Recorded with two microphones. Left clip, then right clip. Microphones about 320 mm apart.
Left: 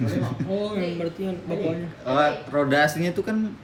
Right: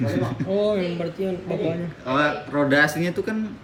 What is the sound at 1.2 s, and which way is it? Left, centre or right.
Speech, centre.